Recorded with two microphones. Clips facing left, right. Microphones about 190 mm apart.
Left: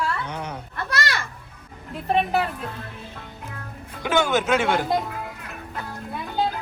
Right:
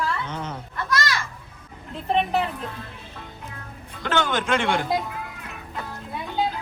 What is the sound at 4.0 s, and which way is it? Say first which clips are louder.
Speech: left 3 dB; 10° left (ahead or behind).